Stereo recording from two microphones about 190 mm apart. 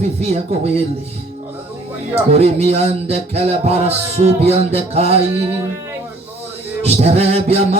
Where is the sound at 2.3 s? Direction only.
35° right (ahead or behind).